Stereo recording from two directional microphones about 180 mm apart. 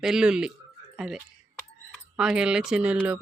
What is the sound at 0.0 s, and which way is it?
Speech, 5° right (ahead or behind).